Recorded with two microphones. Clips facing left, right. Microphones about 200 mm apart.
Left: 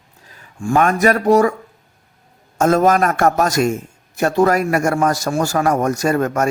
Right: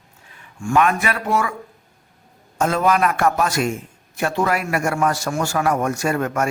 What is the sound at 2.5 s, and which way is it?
A man's voice, 45° left (ahead or behind).